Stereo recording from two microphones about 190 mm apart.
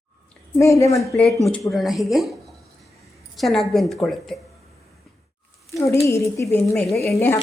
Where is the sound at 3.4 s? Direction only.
Centre (ahead or behind).